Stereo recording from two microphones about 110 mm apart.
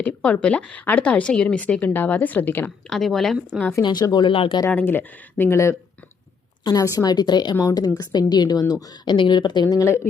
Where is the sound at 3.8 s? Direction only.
40° left (ahead or behind).